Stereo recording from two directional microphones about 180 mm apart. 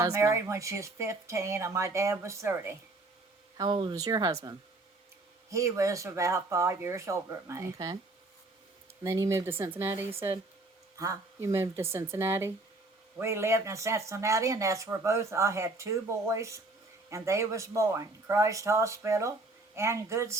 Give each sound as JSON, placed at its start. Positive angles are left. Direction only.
{"t": 0.0, "sound": "speech", "side_deg": -15}
{"t": 3.6, "sound": "speech", "side_deg": -25}
{"t": 5.5, "sound": "speech", "side_deg": -15}
{"t": 9.0, "sound": "speech", "side_deg": -15}